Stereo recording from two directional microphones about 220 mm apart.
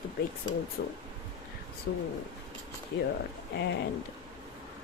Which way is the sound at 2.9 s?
60° left (ahead or behind).